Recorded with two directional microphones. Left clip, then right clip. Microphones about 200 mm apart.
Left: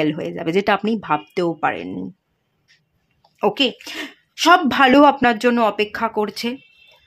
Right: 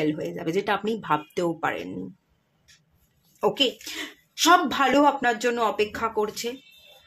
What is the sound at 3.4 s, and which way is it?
Speech, 35° left (ahead or behind).